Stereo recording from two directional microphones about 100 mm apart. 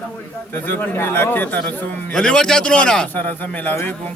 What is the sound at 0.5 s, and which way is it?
A man's voice, 20° left (ahead or behind).